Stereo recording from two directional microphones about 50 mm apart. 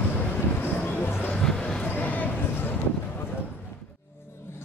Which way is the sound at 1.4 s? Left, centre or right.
Centre.